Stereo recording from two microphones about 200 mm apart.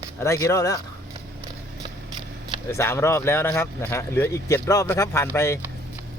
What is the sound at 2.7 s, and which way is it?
Speech, 15° left (ahead or behind).